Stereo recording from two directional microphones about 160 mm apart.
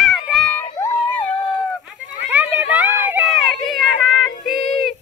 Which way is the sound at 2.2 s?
10° right (ahead or behind).